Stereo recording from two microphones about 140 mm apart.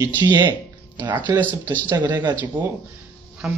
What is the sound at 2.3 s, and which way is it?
Speech, 15° right (ahead or behind).